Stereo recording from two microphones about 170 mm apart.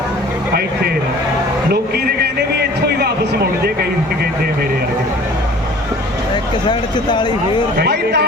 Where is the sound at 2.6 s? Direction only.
70° right (ahead or behind).